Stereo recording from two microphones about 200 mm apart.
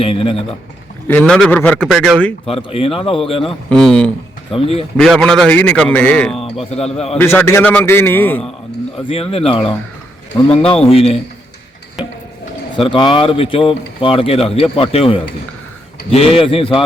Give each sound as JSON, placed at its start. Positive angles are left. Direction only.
{"t": 0.0, "sound": "speech", "side_deg": 25}
{"t": 1.0, "sound": "a man's voice", "side_deg": 10}
{"t": 2.5, "sound": "speech", "side_deg": 25}
{"t": 3.4, "sound": "a man's voice", "side_deg": 0}
{"t": 4.5, "sound": "speech", "side_deg": 30}
{"t": 4.9, "sound": "a man's voice", "side_deg": 0}
{"t": 6.4, "sound": "a man's voice", "side_deg": 30}
{"t": 7.2, "sound": "a man's voice", "side_deg": 10}
{"t": 9.0, "sound": "speech", "side_deg": 30}
{"t": 12.7, "sound": "speech", "side_deg": 25}